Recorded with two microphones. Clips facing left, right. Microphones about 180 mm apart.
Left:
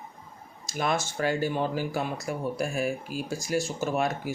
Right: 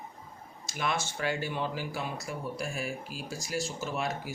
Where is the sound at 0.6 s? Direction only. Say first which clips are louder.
Left 4 dB; 40° left (ahead or behind).